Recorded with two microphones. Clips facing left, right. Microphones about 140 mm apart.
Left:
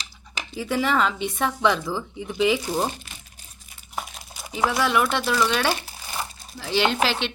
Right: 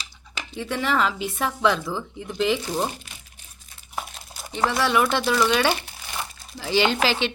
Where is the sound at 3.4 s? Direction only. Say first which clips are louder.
Left 1 dB; 35° left (ahead or behind).